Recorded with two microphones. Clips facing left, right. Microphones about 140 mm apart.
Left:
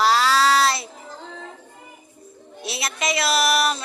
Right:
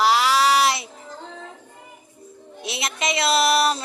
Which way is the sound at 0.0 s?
15° right (ahead or behind).